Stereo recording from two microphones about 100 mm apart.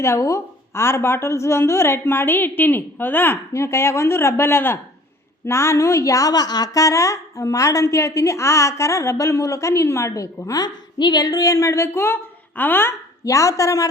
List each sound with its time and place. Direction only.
0.0 s a woman's voice: 30° left (ahead or behind)
13.2 s a woman's voice: 30° left (ahead or behind)